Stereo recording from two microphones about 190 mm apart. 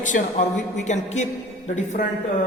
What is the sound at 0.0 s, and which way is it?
A man's voice, 40° left (ahead or behind).